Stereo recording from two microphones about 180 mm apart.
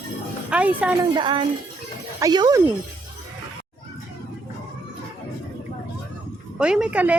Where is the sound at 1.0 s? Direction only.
25° right (ahead or behind).